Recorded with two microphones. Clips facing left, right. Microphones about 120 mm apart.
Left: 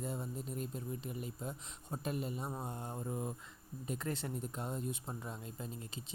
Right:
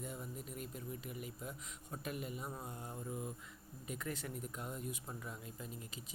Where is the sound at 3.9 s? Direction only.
30° left (ahead or behind).